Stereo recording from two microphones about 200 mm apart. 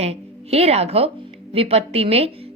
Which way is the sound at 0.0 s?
30° right (ahead or behind).